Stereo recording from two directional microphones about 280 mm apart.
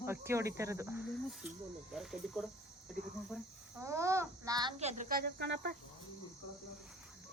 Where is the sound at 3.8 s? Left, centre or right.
Centre; by 5.7 s right.